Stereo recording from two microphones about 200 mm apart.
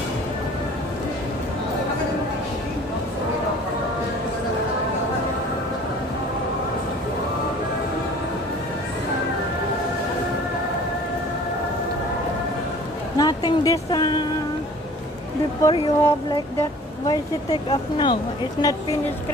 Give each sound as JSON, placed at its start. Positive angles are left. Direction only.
{"t": 13.2, "sound": "speech", "side_deg": 20}
{"t": 15.6, "sound": "speech", "side_deg": 20}